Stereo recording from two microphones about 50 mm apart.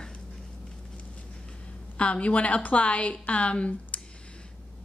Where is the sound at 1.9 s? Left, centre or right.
Left.